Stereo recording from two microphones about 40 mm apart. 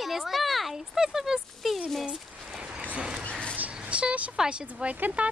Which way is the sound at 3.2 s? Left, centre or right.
Left.